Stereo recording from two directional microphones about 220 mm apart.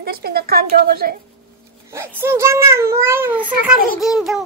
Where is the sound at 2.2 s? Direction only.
10° right (ahead or behind).